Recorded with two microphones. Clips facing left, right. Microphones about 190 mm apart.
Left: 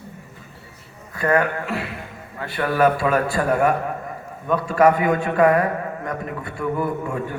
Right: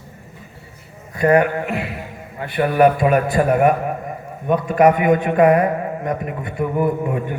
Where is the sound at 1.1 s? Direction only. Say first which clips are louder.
Right 5 dB; 20° right (ahead or behind).